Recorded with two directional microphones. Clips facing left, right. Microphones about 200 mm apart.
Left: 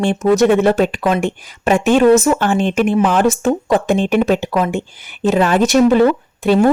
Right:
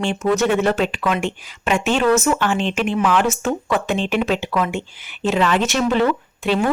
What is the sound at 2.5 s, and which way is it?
Speech, 50° left (ahead or behind).